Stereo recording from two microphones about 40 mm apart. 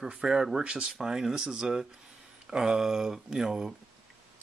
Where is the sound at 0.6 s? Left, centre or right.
Right.